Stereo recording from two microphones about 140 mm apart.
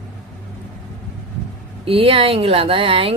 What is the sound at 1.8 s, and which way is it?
A woman's voice, 40° right (ahead or behind).